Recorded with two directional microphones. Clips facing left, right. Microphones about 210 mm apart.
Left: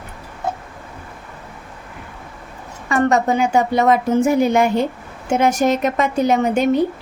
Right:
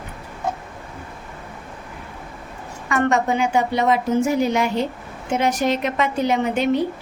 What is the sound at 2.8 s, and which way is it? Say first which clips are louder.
A woman's voice: left 3 dB; 35° left (ahead or behind).